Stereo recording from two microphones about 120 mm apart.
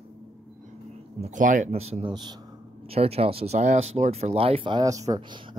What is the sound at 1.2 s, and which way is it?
Speech, 90° right.